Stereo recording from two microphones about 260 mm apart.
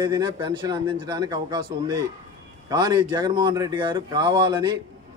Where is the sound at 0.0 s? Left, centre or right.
Centre.